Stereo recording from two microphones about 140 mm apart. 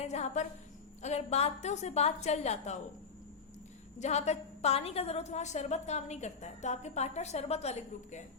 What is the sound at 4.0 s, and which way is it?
A woman's voice, 55° left (ahead or behind).